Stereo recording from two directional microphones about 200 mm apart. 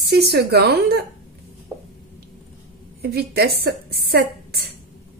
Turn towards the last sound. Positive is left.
turn(degrees=-55)  # may be behind; listen again after turning